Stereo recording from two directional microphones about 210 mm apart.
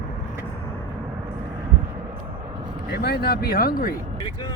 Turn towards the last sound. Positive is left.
turn(degrees=45)  # may be behind; listen again after turning